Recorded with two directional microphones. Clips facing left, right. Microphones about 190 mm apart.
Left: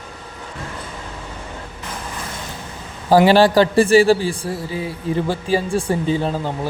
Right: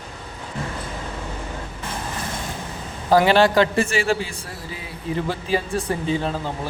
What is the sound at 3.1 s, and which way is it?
A man's voice, 35° left (ahead or behind).